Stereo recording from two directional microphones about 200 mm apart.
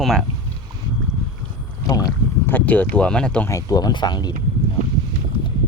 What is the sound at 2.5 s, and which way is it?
Speech, 10° left (ahead or behind).